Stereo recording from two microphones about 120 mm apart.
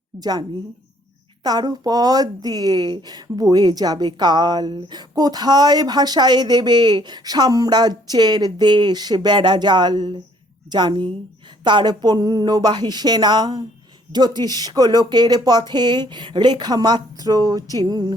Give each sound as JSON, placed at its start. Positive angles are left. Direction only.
{"t": 0.2, "sound": "speech", "side_deg": -35}
{"t": 1.5, "sound": "speech", "side_deg": -35}